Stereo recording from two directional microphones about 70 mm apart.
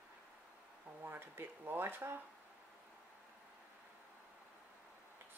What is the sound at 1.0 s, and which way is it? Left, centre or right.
Speech, right.